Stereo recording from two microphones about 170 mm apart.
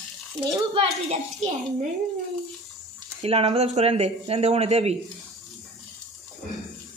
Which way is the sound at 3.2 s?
35° right (ahead or behind).